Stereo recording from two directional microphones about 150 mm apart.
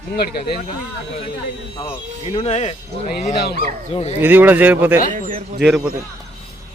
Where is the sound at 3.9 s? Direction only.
45° left (ahead or behind).